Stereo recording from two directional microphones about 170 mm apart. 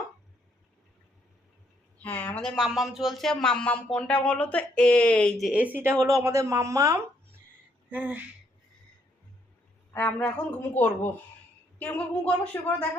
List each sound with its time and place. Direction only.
2.0 s speech: 10° left (ahead or behind); by 8.2 s 10° right (ahead or behind)
9.9 s speech: 10° left (ahead or behind)